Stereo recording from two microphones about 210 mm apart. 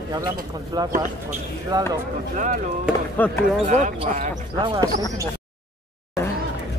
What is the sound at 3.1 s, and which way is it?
Speech, 5° left (ahead or behind).